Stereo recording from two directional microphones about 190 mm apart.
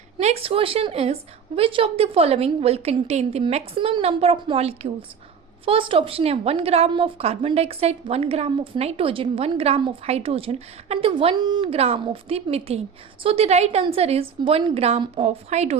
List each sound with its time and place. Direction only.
0.2 s a woman's voice: 35° right (ahead or behind)